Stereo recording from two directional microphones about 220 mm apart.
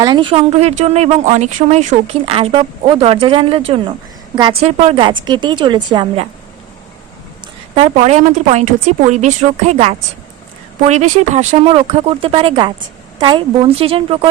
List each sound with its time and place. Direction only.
0.0 s speech: 20° right (ahead or behind)
7.8 s speech: 30° right (ahead or behind)